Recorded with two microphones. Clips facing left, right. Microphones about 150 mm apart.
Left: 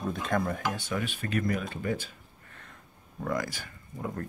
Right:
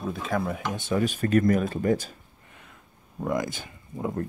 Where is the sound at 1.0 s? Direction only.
40° right (ahead or behind).